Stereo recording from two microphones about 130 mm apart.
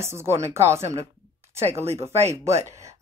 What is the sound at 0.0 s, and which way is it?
Speech, 20° right (ahead or behind).